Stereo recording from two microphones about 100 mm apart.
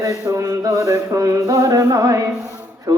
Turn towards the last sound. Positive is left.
turn(degrees=-40)  # may be behind; listen again after turning